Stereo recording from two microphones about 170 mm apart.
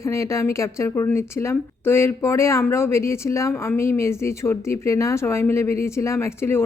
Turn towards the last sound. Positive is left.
turn(degrees=15)  # may be behind; listen again after turning